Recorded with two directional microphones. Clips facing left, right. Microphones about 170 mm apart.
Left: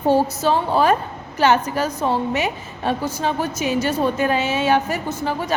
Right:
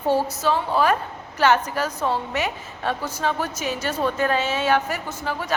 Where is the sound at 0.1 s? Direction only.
25° left (ahead or behind).